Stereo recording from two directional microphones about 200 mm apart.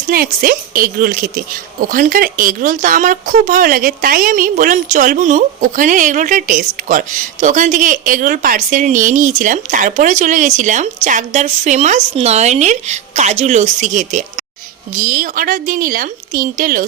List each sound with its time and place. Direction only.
0.1 s a woman's voice: 45° right (ahead or behind)